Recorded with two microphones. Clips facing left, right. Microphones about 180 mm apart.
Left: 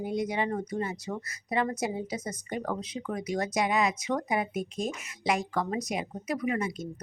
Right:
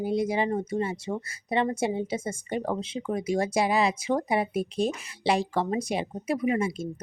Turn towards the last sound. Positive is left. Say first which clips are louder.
# right 4 dB
turn(degrees=-25)  # may be behind; listen again after turning